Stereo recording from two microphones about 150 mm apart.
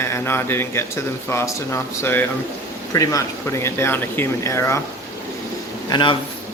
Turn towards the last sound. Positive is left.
turn(degrees=30)  # may be behind; listen again after turning